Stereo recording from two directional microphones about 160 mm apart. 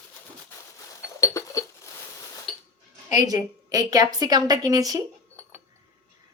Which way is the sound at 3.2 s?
20° right (ahead or behind).